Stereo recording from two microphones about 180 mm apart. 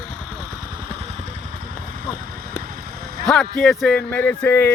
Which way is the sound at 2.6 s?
55° right (ahead or behind).